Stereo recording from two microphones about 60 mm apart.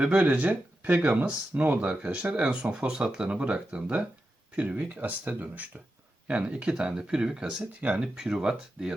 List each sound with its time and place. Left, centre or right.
0.0 s speech: centre
7.6 s speech: right